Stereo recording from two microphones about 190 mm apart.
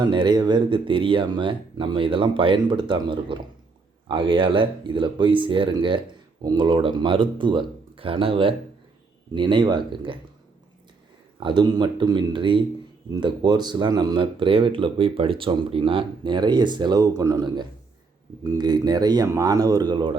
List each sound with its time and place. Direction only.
0.0 s speech: 25° right (ahead or behind)
11.3 s speech: 25° right (ahead or behind)